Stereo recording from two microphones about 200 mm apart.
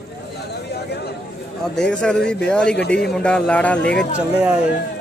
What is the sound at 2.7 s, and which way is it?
Speech, 55° left (ahead or behind).